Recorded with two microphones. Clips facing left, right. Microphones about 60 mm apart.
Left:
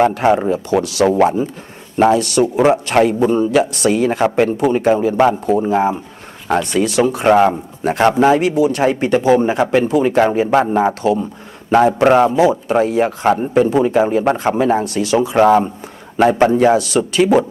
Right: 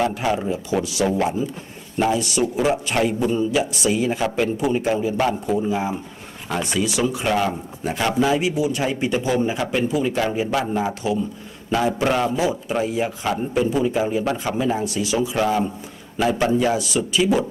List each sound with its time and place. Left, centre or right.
0.0 s speech: left
1.1 s a man's voice: left
2.0 s speech: left
2.4 s a man's voice: left
3.5 s a man's voice: left
12.4 s a man's voice: left
16.7 s speech: left